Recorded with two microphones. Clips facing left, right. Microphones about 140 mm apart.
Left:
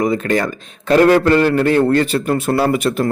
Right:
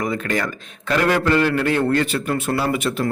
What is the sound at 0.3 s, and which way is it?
A man's voice, 35° left (ahead or behind).